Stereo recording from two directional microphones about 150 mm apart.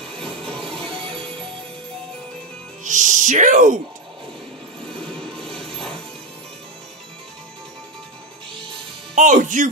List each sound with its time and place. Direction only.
2.8 s speech: 55° right (ahead or behind)
5.0 s music: 5° left (ahead or behind)
9.1 s speech: 55° right (ahead or behind)